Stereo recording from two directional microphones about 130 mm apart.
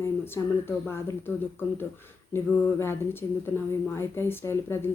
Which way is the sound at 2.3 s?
20° left (ahead or behind).